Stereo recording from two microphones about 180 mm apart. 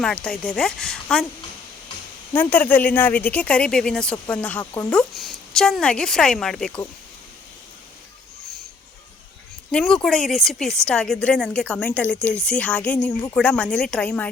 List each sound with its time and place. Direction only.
0.0 s a woman's voice: 5° left (ahead or behind)
2.3 s speech: 10° left (ahead or behind)
4.9 s a woman's voice: centre (ahead or behind)
9.7 s a woman's voice: 5° left (ahead or behind)